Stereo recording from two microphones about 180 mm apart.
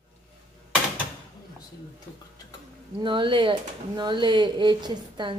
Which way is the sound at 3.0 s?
25° right (ahead or behind).